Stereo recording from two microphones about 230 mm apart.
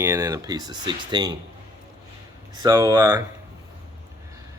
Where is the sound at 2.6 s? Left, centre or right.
Centre.